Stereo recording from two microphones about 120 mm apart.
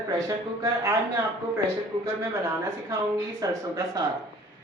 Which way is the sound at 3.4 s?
30° right (ahead or behind).